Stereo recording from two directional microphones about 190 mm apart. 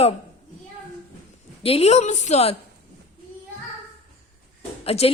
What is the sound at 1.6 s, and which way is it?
Speech, 30° left (ahead or behind).